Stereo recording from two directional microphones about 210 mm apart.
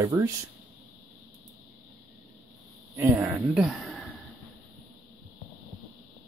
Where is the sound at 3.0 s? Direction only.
10° right (ahead or behind).